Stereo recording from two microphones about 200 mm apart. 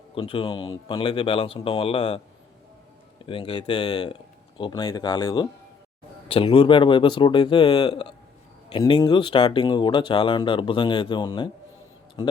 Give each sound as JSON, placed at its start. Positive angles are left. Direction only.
{"t": 0.1, "sound": "speech", "side_deg": 25}
{"t": 3.2, "sound": "speech", "side_deg": 25}